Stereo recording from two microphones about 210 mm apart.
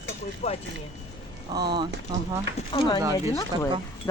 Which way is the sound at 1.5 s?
20° right (ahead or behind).